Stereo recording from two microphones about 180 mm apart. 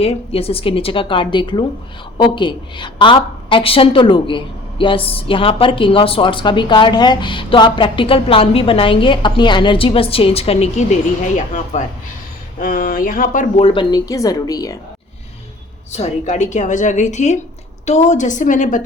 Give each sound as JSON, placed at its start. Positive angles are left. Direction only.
{"t": 0.0, "sound": "a woman's voice", "side_deg": 35}
{"t": 15.9, "sound": "a woman's voice", "side_deg": 40}